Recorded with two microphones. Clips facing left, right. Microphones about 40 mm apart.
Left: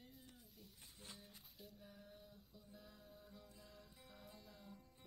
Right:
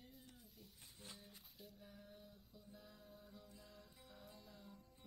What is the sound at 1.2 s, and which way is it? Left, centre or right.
Music, centre.